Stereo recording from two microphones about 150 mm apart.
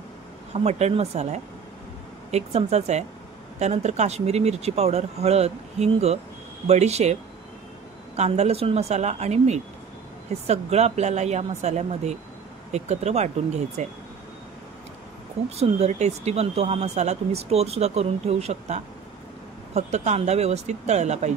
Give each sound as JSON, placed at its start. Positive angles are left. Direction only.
{"t": 0.5, "sound": "speech", "side_deg": -45}
{"t": 8.2, "sound": "speech", "side_deg": -45}
{"t": 15.5, "sound": "speech", "side_deg": -45}